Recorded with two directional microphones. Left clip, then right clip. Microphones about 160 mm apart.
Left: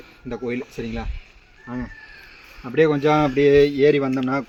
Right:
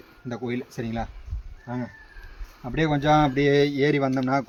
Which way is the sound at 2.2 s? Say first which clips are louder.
Left 5 dB; 20° right (ahead or behind).